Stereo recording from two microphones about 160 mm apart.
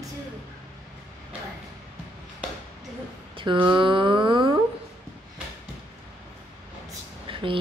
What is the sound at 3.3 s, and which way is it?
Speech, 30° right (ahead or behind).